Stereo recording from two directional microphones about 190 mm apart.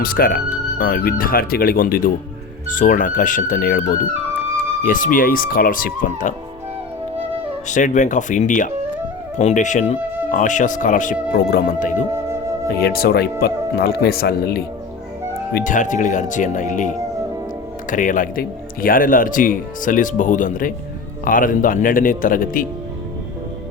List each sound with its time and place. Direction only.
0.0 s speech: 50° left (ahead or behind)
7.7 s speech: 40° left (ahead or behind)
11.3 s speech: 55° left (ahead or behind)
15.5 s speech: 40° left (ahead or behind)
17.9 s speech: 45° left (ahead or behind)